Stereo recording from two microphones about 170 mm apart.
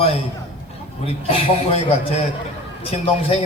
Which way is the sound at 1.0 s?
35° left (ahead or behind).